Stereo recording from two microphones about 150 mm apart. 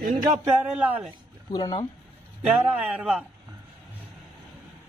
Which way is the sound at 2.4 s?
10° right (ahead or behind).